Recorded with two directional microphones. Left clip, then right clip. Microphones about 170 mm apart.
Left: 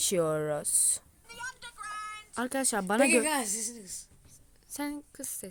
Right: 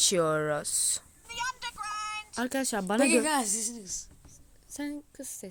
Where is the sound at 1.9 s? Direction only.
15° right (ahead or behind).